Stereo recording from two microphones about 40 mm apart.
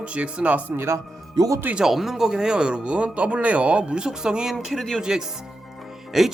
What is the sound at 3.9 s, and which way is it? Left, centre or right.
Speech, centre.